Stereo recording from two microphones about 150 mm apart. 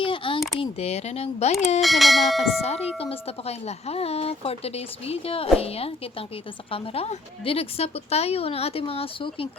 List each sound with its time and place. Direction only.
0.0 s a sound: 35° left (ahead or behind)
0.6 s speech: 45° left (ahead or behind)
1.8 s bell: centre (ahead or behind)
2.6 s speech: 45° left (ahead or behind)